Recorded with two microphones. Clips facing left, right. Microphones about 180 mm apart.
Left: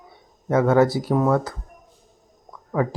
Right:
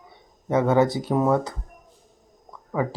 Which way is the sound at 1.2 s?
10° right (ahead or behind).